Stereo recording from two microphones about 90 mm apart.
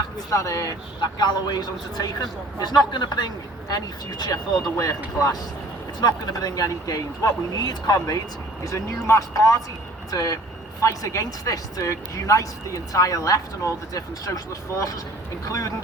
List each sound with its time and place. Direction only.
0.3 s a man's voice: 40° left (ahead or behind)
4.8 s a man's voice: 40° left (ahead or behind)